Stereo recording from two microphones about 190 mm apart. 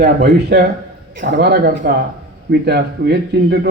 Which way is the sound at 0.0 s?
60° right (ahead or behind).